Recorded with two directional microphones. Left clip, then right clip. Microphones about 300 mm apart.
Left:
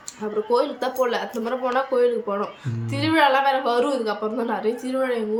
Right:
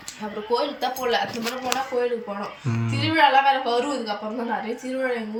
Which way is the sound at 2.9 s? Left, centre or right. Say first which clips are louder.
Even; centre.